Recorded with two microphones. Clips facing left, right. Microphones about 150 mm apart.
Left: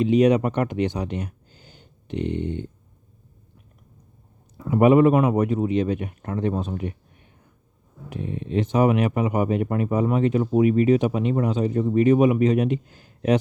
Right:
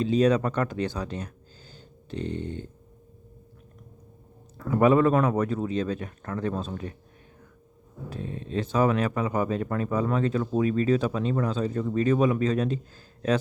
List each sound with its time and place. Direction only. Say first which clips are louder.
0.0 s speech: left 4 dB; 20° left (ahead or behind)
4.5 s a man's voice: left 4 dB; 15° left (ahead or behind)
8.1 s speech: left 5 dB; 20° left (ahead or behind)